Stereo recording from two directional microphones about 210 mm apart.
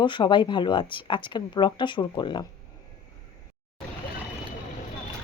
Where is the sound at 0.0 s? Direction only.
20° left (ahead or behind).